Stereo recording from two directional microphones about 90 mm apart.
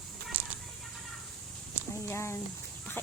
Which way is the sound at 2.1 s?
30° left (ahead or behind).